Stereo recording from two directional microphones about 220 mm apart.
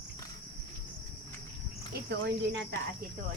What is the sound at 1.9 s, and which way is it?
Speech, 50° right (ahead or behind).